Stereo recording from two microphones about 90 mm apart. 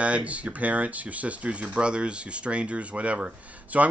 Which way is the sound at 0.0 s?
15° right (ahead or behind).